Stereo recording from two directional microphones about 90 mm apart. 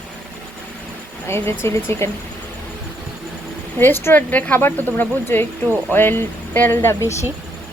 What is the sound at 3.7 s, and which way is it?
A woman's voice, 25° left (ahead or behind).